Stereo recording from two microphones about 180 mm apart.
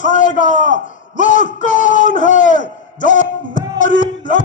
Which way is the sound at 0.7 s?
45° left (ahead or behind).